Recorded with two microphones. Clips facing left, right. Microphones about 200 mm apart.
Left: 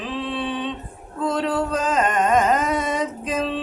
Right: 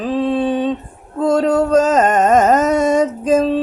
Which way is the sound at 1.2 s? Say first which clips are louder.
Right 8 dB; 45° right (ahead or behind).